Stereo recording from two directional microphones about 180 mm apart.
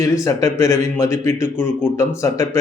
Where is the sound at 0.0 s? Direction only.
15° left (ahead or behind).